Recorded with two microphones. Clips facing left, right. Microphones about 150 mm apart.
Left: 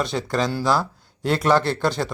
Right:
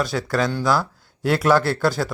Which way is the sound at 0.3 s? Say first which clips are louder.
Right 1 dB; centre (ahead or behind).